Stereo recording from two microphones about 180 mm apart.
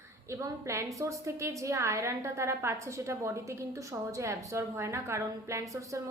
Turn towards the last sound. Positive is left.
turn(degrees=-20)  # may be behind; listen again after turning